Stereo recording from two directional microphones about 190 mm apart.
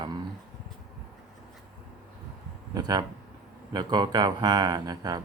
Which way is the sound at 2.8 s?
20° right (ahead or behind).